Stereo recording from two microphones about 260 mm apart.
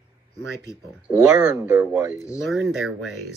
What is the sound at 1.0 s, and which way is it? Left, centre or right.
Speech, centre.